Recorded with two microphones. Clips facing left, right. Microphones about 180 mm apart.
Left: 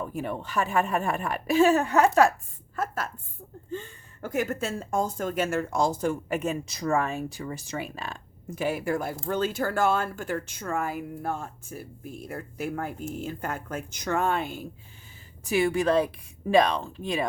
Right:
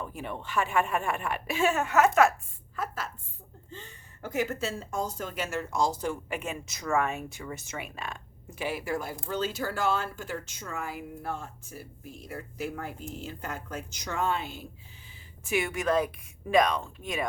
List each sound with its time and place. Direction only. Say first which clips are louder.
0.1 s speech: left 3 dB; 45° left (ahead or behind)
2.7 s a woman's voice: left 4 dB; 50° left (ahead or behind)
15.4 s speech: left 5 dB; 35° left (ahead or behind)